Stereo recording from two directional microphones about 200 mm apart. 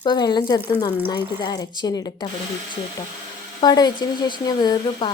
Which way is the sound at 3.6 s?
20° left (ahead or behind).